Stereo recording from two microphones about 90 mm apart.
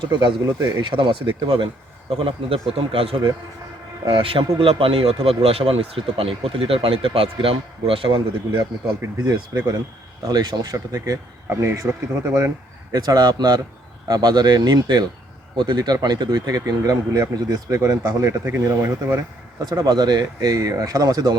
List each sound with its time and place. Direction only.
0.0 s speech: 60° right (ahead or behind); by 3.2 s 90° right
4.0 s speech: 75° right (ahead or behind)
10.2 s speech: 50° right (ahead or behind)
11.6 s speech: 30° right (ahead or behind)
12.9 s speech: 45° right (ahead or behind)
18.4 s speech: 20° right (ahead or behind)
19.7 s speech: 50° right (ahead or behind)